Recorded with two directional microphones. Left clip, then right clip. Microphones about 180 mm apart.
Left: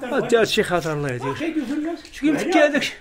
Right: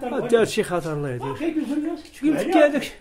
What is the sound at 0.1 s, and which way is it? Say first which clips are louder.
Speech: left 2 dB; 10° left (ahead or behind).